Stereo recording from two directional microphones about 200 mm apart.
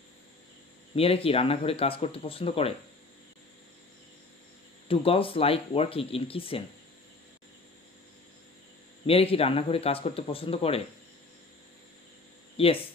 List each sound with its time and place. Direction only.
0.9 s speech: 30° left (ahead or behind)
4.8 s speech: 30° left (ahead or behind)
9.0 s speech: 30° left (ahead or behind)
12.6 s speech: 30° left (ahead or behind)